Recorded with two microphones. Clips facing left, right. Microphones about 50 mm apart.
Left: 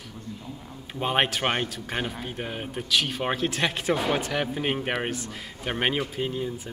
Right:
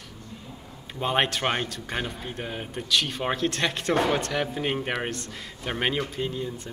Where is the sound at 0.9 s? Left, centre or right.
Centre.